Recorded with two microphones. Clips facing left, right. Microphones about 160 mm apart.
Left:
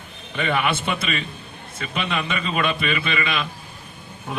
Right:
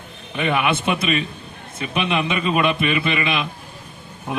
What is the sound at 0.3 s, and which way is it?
A man's voice, 15° right (ahead or behind).